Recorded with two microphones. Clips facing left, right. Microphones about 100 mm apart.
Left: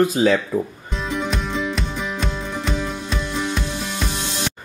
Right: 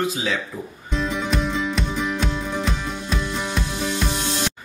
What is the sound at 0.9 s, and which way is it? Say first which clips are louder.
Music: right 3 dB; centre (ahead or behind).